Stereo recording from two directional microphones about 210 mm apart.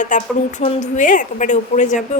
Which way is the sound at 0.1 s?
40° left (ahead or behind).